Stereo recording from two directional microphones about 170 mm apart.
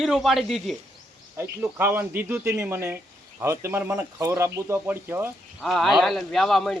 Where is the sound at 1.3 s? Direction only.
10° right (ahead or behind).